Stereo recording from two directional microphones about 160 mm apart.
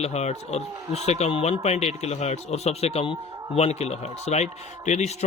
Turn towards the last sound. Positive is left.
turn(degrees=45)  # may be behind; listen again after turning